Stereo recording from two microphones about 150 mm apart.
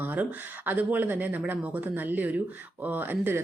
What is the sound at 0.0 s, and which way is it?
A woman's voice, 10° right (ahead or behind).